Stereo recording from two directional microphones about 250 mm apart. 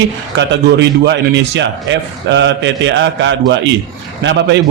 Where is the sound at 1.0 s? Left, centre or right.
Right.